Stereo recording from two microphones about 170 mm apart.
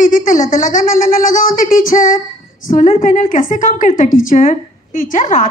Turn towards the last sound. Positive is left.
turn(degrees=50)  # may be behind; listen again after turning